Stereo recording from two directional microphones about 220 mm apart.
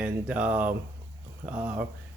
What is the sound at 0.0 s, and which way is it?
Speech, 5° right (ahead or behind).